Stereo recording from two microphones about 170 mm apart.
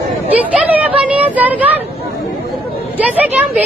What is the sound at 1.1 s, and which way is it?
Speech, 10° right (ahead or behind).